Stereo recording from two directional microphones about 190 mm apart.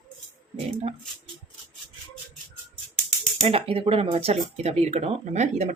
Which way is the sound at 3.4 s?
30° right (ahead or behind).